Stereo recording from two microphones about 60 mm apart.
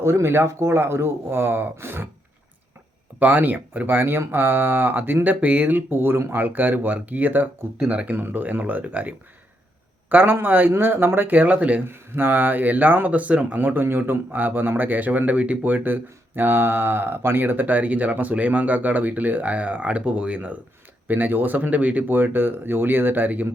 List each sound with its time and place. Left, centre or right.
0.0 s speech: right
3.2 s speech: right
11.9 s speech: right